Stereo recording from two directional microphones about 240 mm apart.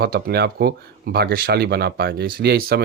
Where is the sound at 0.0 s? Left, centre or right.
Right.